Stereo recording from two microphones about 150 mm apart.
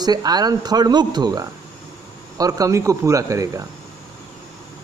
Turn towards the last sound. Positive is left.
turn(degrees=-20)  # may be behind; listen again after turning